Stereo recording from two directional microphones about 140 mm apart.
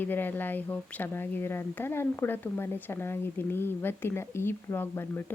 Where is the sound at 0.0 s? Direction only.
15° left (ahead or behind).